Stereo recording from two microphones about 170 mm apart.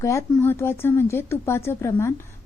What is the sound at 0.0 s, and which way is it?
Speech, 15° left (ahead or behind).